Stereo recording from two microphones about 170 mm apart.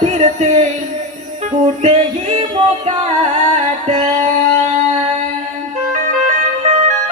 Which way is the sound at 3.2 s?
45° right (ahead or behind).